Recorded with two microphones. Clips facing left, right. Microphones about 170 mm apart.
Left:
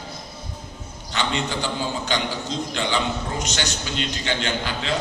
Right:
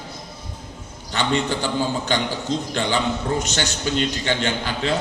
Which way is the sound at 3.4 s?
50° right (ahead or behind).